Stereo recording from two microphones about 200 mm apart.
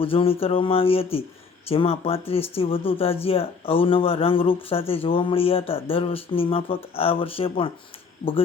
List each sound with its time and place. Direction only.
0.0 s speech: 25° left (ahead or behind)